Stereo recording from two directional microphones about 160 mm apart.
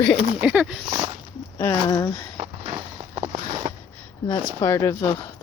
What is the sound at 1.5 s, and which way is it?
Speech, 15° left (ahead or behind).